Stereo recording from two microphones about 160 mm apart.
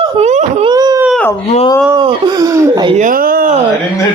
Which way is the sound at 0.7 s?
25° right (ahead or behind).